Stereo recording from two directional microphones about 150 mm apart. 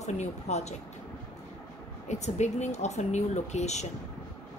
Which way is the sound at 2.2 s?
50° left (ahead or behind).